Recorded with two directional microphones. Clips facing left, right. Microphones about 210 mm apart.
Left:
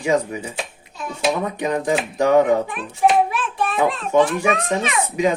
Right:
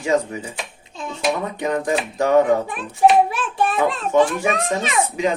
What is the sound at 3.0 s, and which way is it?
Speech, 35° right (ahead or behind).